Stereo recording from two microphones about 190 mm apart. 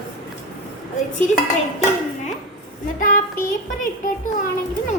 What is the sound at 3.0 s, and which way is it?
Speech, 45° left (ahead or behind).